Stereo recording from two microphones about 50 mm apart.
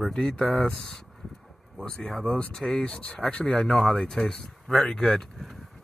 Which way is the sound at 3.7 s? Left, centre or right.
Centre.